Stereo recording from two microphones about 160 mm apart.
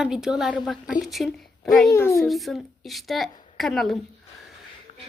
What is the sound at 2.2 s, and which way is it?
A woman's voice, centre (ahead or behind).